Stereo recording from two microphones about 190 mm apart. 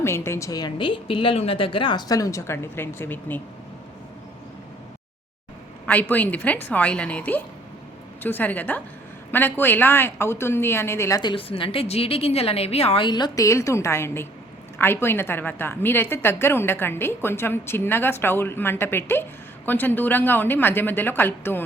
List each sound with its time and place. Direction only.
0.0 s a woman's voice: 15° left (ahead or behind)
5.8 s a woman's voice: 10° left (ahead or behind)